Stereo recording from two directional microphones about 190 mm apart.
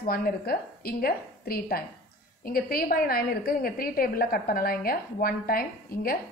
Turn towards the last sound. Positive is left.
turn(degrees=50)  # may be behind; listen again after turning